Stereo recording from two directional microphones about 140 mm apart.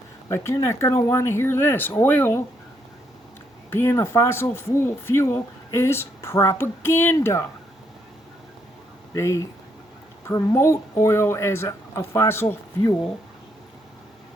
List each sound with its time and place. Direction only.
0.3 s speech: 20° left (ahead or behind)
3.7 s speech: 20° left (ahead or behind)
9.1 s speech: 20° left (ahead or behind)